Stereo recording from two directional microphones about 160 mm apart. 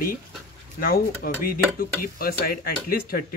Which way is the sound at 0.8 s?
65° left (ahead or behind).